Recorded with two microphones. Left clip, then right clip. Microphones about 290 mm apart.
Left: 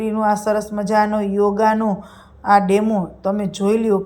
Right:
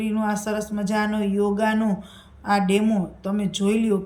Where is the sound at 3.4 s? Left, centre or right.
Centre.